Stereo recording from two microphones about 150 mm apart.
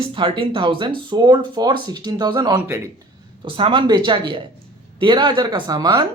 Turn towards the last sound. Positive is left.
turn(degrees=-30)  # may be behind; listen again after turning